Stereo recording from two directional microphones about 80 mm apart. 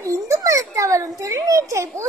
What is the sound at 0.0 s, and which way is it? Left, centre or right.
A child's voice, right.